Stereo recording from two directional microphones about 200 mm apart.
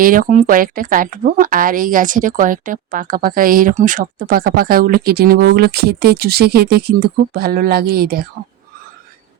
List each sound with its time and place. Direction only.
0.0 s speech: 45° right (ahead or behind)